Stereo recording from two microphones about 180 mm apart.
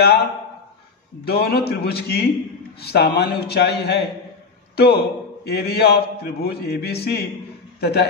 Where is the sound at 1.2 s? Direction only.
60° left (ahead or behind).